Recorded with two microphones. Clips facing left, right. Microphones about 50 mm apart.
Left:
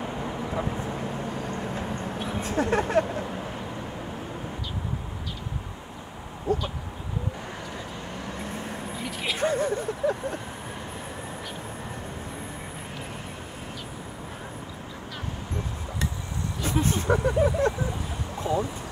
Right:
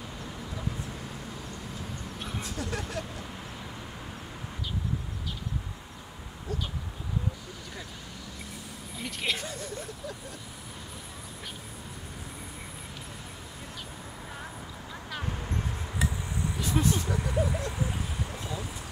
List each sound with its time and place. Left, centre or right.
0.2 s vehicle: left
2.1 s vehicle: centre
2.4 s speech: left
6.5 s speech: left
9.0 s a sound: centre
9.4 s speech: left
16.8 s vehicle: left
18.4 s boat: left